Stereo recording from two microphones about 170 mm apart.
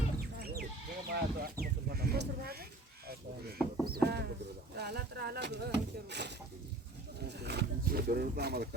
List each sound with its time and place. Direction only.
0.4 s sheep: 65° right (ahead or behind)
1.1 s speech: 60° right (ahead or behind)
3.1 s a sound: 65° right (ahead or behind)
4.7 s speech: 75° right (ahead or behind); by 6.3 s 90° right
7.4 s speech: 70° right (ahead or behind)